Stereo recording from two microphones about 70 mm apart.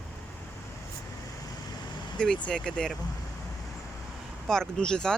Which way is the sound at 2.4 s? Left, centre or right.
Centre.